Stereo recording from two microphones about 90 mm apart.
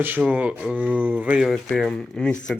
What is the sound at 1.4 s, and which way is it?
Speech, 5° left (ahead or behind).